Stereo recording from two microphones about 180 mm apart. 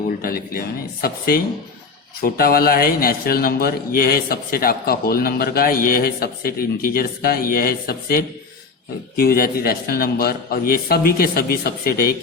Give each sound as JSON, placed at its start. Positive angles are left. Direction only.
{"t": 0.2, "sound": "a man's voice", "side_deg": 55}